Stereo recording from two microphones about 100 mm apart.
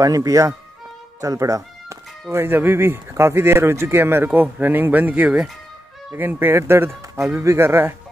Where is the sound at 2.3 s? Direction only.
20° right (ahead or behind).